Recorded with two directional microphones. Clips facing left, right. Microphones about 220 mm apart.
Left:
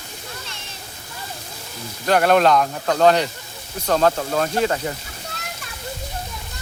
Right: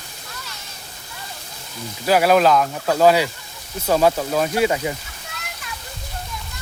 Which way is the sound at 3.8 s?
10° right (ahead or behind).